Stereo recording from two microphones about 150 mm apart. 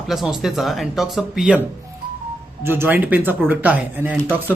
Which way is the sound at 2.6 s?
15° right (ahead or behind).